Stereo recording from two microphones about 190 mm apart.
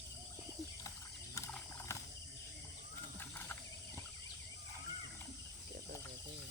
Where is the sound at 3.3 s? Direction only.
10° left (ahead or behind).